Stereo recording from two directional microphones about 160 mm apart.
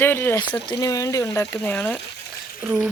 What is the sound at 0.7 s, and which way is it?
Speech, 25° left (ahead or behind).